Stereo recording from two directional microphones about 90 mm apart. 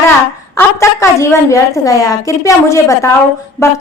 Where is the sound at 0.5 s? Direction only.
30° left (ahead or behind).